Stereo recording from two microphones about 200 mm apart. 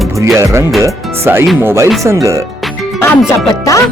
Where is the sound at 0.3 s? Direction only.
15° right (ahead or behind).